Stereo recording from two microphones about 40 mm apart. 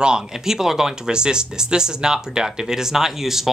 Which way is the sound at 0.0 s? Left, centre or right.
Centre.